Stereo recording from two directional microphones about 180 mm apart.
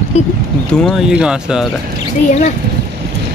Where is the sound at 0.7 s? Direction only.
Centre (ahead or behind).